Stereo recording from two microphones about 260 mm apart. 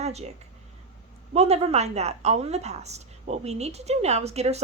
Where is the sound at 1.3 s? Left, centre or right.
Right.